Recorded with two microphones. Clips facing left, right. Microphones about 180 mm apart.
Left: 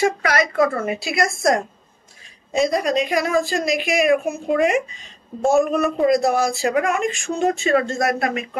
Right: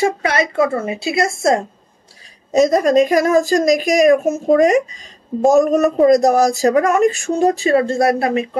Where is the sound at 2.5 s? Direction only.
45° right (ahead or behind).